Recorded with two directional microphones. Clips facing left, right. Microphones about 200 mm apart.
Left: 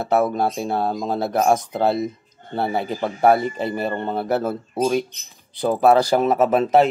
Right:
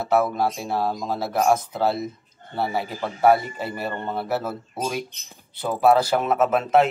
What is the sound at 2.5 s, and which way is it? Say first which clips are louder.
A man's voice: left 3 dB; 25° left (ahead or behind).